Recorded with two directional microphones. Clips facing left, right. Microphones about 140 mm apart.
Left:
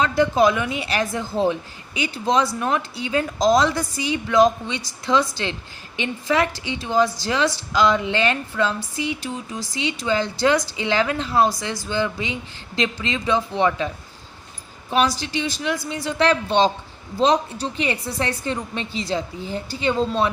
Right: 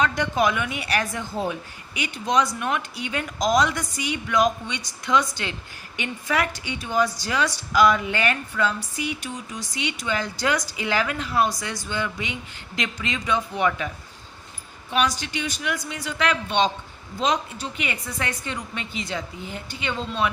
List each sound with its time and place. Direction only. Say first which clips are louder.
0.2 s a woman's voice: left 5 dB; 30° left (ahead or behind)